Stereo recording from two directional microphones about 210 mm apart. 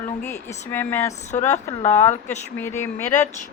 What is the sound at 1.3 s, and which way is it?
Speech, 35° left (ahead or behind).